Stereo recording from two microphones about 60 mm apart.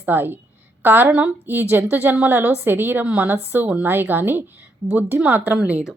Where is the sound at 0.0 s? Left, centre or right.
Right.